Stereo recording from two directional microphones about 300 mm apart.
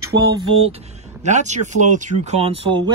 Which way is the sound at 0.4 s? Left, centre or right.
Centre.